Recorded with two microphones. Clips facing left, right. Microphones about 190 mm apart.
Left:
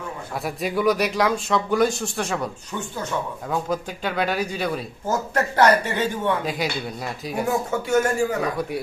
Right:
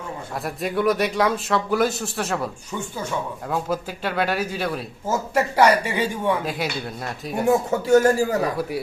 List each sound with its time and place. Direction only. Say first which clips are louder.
0.4 s speech: even; centre (ahead or behind)
3.5 s speech: even; 5° right (ahead or behind)
7.4 s a man's voice: right 6 dB; 30° right (ahead or behind)